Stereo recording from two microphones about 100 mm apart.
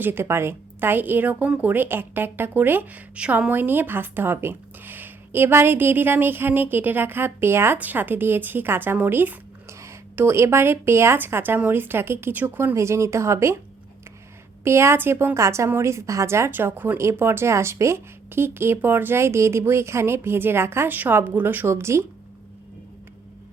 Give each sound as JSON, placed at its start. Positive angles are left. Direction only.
{"t": 0.0, "sound": "speech", "side_deg": -25}
{"t": 14.6, "sound": "speech", "side_deg": -25}